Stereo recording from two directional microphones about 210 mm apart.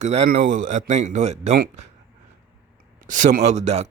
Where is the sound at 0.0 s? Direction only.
35° right (ahead or behind).